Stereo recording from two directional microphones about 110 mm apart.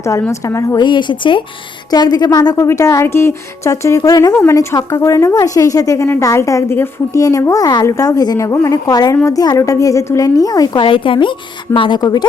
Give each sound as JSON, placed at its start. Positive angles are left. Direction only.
{"t": 0.0, "sound": "a woman's voice", "side_deg": 30}
{"t": 0.8, "sound": "a woman's voice", "side_deg": 45}
{"t": 10.8, "sound": "a woman's voice", "side_deg": 50}